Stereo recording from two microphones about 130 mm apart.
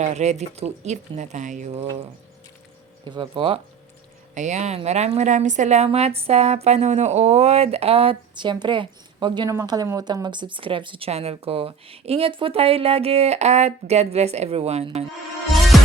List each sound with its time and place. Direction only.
0.0 s a woman's voice: 60° right (ahead or behind)
3.0 s speech: 40° right (ahead or behind)
4.4 s a woman's voice: 65° right (ahead or behind)
15.7 s music: centre (ahead or behind)